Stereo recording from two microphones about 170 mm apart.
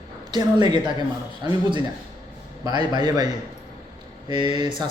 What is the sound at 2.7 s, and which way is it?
Speech, 25° right (ahead or behind).